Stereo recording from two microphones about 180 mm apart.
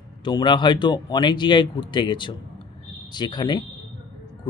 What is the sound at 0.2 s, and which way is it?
A man's voice, 25° left (ahead or behind).